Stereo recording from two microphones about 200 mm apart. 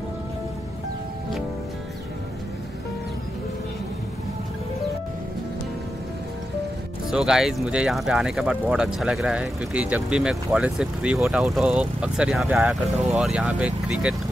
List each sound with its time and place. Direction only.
7.1 s speech: 5° right (ahead or behind)